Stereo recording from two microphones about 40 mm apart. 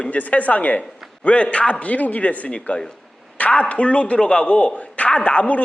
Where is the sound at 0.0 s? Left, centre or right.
Left.